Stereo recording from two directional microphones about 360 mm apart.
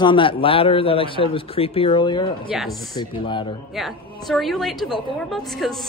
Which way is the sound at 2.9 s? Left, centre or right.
Centre.